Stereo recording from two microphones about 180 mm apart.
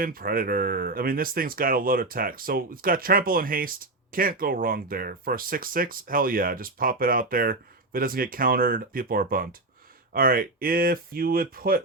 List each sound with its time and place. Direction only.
0.0 s speech: 55° right (ahead or behind)